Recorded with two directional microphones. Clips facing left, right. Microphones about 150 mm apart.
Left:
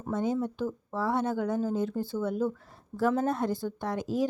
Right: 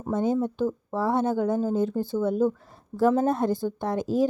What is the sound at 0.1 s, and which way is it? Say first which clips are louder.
A woman's voice: right 5 dB; 25° right (ahead or behind).